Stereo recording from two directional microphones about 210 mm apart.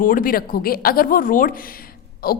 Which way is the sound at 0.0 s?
40° left (ahead or behind).